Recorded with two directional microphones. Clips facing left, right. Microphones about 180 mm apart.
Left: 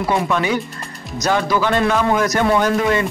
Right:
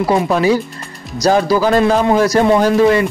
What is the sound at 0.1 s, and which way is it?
Speech, 35° right (ahead or behind).